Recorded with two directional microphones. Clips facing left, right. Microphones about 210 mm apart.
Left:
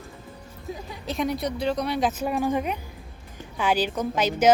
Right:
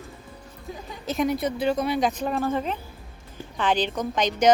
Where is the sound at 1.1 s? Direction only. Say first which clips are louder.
Right 2 dB; centre (ahead or behind).